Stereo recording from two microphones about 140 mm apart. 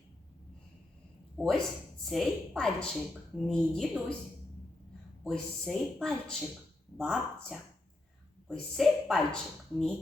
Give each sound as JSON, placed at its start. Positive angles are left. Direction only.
{"t": 1.4, "sound": "speech", "side_deg": 5}
{"t": 5.2, "sound": "speech", "side_deg": 5}